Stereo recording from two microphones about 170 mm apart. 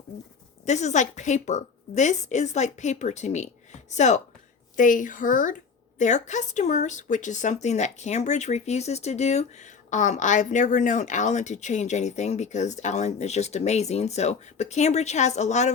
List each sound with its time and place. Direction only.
0.6 s a woman's voice: 45° left (ahead or behind)